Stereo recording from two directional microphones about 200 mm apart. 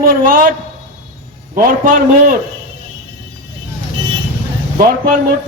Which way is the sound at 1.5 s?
45° right (ahead or behind).